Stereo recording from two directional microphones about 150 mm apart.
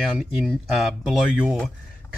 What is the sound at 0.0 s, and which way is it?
Speech, centre (ahead or behind).